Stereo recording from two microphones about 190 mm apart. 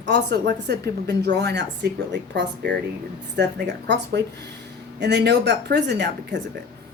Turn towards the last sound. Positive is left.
turn(degrees=-60)  # may be behind; listen again after turning